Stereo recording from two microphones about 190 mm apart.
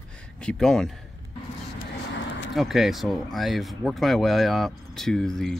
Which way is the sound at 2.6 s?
Centre (ahead or behind).